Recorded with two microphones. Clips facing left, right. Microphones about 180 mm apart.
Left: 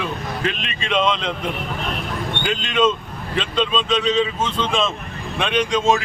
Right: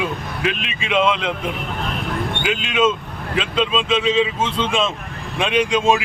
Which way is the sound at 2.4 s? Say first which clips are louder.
Even; 5° right (ahead or behind).